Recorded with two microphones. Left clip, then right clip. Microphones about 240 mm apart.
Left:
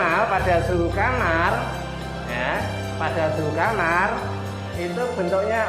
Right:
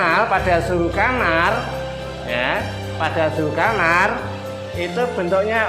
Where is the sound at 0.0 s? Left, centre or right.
Right.